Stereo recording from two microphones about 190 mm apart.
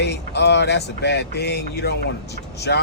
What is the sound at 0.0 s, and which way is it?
Speech, 60° left (ahead or behind).